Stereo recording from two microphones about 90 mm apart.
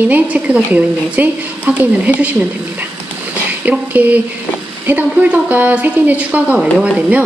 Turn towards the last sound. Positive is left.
turn(degrees=-10)  # may be behind; listen again after turning